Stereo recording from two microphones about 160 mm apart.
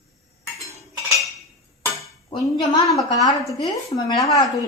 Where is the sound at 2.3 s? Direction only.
25° left (ahead or behind).